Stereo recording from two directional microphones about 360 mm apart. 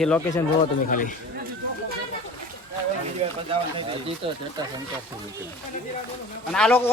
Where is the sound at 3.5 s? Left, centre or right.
Centre.